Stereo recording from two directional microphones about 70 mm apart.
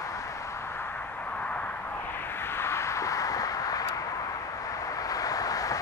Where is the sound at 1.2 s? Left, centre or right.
Left.